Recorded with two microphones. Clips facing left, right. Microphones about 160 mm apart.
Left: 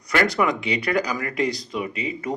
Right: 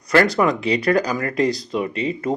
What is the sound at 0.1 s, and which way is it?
Speech, 35° right (ahead or behind).